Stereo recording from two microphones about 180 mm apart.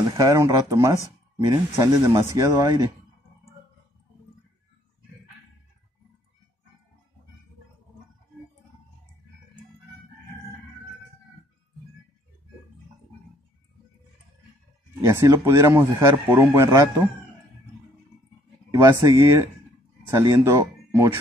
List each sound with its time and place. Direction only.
0.0 s speech: 20° right (ahead or behind)
15.0 s speech: 15° right (ahead or behind)
18.7 s speech: 15° right (ahead or behind)